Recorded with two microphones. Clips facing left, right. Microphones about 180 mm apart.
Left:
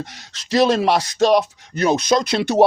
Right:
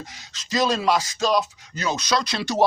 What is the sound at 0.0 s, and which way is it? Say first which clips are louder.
Speech: left 7 dB; 70° left (ahead or behind).